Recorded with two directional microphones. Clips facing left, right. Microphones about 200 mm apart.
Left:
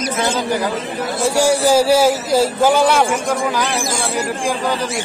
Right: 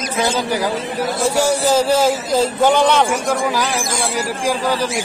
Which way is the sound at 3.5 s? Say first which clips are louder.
Even; 10° right (ahead or behind).